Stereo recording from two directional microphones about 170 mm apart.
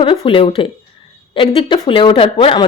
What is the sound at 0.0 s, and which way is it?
Speech, 30° left (ahead or behind).